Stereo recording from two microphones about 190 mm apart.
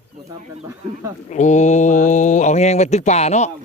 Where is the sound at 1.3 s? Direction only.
40° left (ahead or behind).